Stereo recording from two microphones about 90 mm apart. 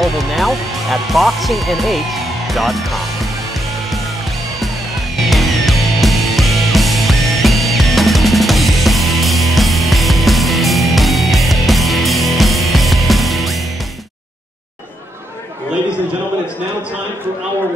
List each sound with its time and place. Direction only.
0.0 s speech: centre (ahead or behind)
5.1 s music: centre (ahead or behind)